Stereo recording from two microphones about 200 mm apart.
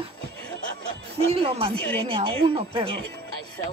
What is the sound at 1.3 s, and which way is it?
Speech, 30° right (ahead or behind).